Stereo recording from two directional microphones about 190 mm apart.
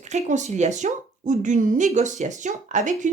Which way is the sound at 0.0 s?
40° right (ahead or behind).